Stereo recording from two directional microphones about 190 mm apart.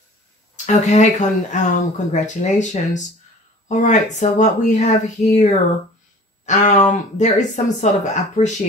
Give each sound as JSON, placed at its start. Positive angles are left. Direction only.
{"t": 0.7, "sound": "speech", "side_deg": 40}